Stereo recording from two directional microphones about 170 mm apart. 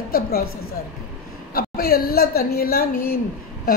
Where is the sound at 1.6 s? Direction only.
65° left (ahead or behind).